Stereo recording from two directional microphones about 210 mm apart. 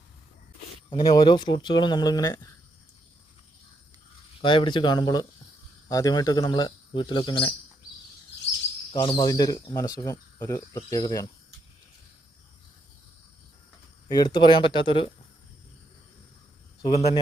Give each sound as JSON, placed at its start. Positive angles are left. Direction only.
{"t": 0.9, "sound": "speech", "side_deg": 25}
{"t": 4.4, "sound": "speech", "side_deg": 25}
{"t": 8.9, "sound": "speech", "side_deg": 25}
{"t": 14.1, "sound": "speech", "side_deg": 20}
{"t": 16.9, "sound": "speech", "side_deg": 30}